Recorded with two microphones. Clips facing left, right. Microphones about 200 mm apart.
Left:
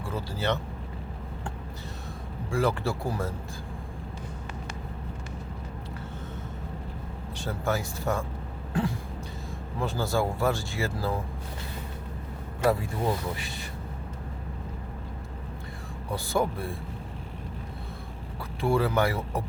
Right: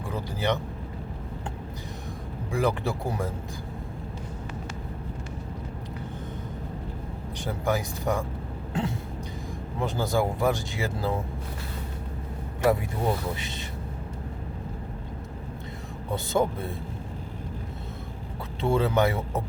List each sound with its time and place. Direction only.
0.1 s speech: 15° right (ahead or behind)
2.5 s speech: 15° right (ahead or behind)
7.3 s speech: 15° right (ahead or behind)
12.6 s speech: 20° right (ahead or behind)
16.0 s speech: 20° right (ahead or behind)
18.6 s speech: 20° right (ahead or behind)